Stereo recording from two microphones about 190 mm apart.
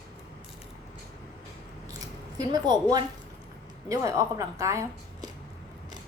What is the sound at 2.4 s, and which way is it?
Speech, 20° right (ahead or behind).